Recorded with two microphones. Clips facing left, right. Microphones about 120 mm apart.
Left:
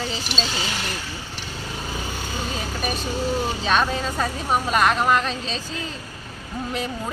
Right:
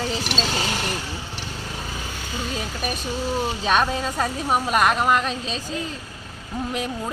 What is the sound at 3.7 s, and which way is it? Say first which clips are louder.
A woman's voice: right 1 dB; 10° right (ahead or behind).